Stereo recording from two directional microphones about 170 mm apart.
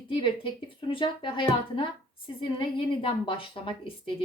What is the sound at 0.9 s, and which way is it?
A woman's voice, 30° left (ahead or behind).